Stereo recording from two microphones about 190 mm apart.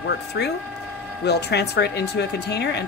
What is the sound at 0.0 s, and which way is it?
Speech, 60° left (ahead or behind).